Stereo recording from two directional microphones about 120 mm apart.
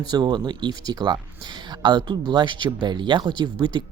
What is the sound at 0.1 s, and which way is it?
Speech, 40° right (ahead or behind).